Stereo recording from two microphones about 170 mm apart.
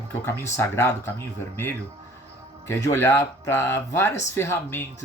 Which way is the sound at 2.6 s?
15° left (ahead or behind).